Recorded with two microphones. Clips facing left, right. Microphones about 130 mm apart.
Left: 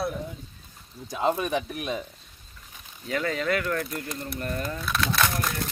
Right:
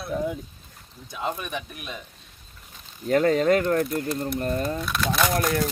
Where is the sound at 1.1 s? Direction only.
30° left (ahead or behind).